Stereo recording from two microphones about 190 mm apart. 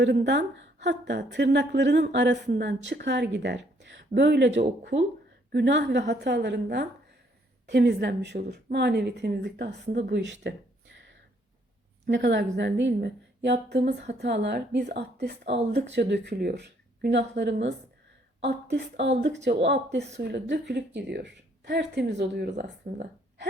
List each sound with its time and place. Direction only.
0.0 s a woman's voice: 65° right (ahead or behind)
12.0 s a woman's voice: 65° right (ahead or behind)